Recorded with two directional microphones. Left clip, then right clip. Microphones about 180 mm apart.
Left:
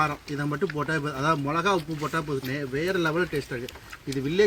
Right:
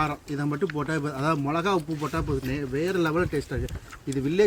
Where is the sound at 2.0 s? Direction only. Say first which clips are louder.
Even; 30° right (ahead or behind).